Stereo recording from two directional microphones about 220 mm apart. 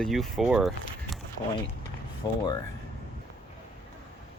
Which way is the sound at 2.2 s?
20° left (ahead or behind).